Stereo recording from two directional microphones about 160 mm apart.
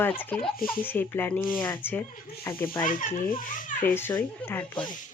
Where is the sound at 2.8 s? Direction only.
60° left (ahead or behind).